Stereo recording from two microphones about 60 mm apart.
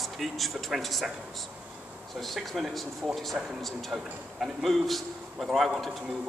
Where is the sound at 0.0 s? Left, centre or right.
Centre.